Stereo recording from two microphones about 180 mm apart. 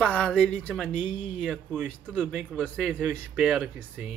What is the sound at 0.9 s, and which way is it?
Speech, 40° left (ahead or behind).